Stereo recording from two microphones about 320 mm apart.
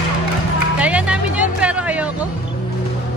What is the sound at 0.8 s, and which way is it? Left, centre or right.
Music, centre.